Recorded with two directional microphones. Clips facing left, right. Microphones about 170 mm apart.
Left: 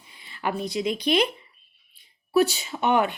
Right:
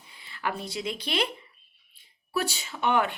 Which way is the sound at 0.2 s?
20° left (ahead or behind).